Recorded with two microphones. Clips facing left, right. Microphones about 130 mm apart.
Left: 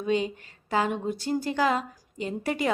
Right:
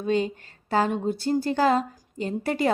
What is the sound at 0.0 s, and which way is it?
A woman's voice, 40° right (ahead or behind).